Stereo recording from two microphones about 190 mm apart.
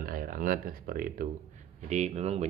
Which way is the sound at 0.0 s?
45° right (ahead or behind).